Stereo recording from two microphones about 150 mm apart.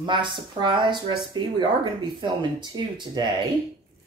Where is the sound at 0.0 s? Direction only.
30° right (ahead or behind).